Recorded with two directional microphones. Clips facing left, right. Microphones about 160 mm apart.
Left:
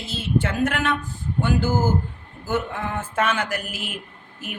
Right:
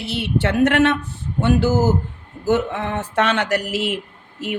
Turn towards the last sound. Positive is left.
turn(degrees=-75)  # may be behind; listen again after turning